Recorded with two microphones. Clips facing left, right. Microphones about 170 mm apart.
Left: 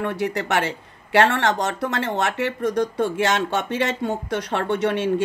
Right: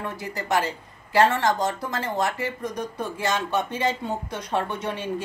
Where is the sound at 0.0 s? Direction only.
75° left (ahead or behind).